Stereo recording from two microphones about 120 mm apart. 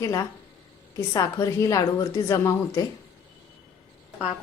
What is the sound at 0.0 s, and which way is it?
A woman's voice, 30° left (ahead or behind).